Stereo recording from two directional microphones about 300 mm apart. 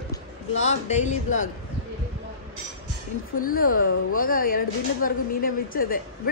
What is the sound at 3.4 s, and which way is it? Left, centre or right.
Speech, left.